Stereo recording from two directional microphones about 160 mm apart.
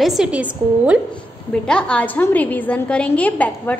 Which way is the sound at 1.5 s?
5° left (ahead or behind).